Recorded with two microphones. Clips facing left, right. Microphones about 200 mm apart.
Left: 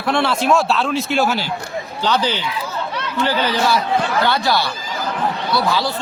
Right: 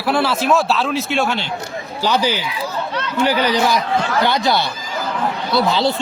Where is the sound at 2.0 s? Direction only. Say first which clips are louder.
Right 1 dB; 10° right (ahead or behind).